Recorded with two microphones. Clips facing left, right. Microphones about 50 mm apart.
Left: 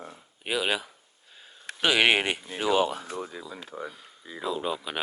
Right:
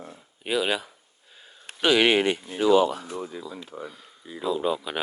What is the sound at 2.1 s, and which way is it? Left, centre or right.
Speech, left.